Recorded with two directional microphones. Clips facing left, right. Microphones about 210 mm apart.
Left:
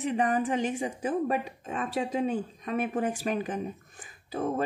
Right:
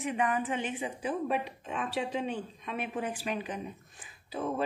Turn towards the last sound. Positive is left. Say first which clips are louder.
# left 4 dB
turn(degrees=50)  # may be behind; listen again after turning